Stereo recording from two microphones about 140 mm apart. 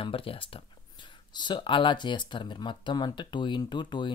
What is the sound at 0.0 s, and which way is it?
Speech, 40° left (ahead or behind).